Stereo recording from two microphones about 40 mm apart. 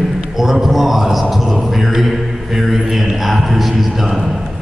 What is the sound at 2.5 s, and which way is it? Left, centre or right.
Speech, centre.